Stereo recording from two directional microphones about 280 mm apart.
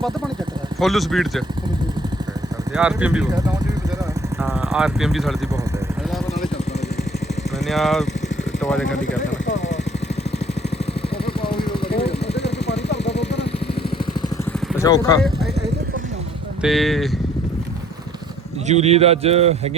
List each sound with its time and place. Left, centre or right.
0.8 s speech: centre
2.7 s speech: centre
4.4 s speech: centre
7.7 s speech: centre
11.9 s vehicle: centre
12.6 s a sound: left
14.8 s speech: centre
16.6 s speech: centre
18.7 s speech: right